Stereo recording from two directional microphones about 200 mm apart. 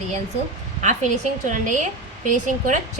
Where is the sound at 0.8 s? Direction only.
40° right (ahead or behind).